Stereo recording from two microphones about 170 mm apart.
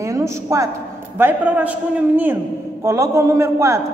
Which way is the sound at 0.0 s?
15° right (ahead or behind).